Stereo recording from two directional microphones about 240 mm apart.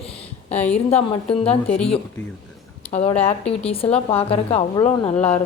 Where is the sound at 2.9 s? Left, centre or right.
Left.